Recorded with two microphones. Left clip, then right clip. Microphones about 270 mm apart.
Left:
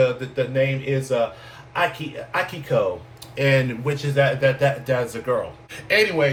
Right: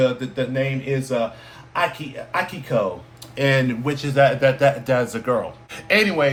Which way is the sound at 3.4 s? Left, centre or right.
Centre.